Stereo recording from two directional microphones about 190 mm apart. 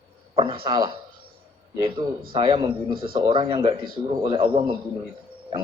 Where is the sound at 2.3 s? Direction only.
25° right (ahead or behind).